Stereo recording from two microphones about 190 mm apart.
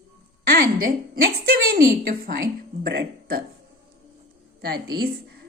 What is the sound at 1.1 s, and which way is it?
A woman's voice, 50° right (ahead or behind).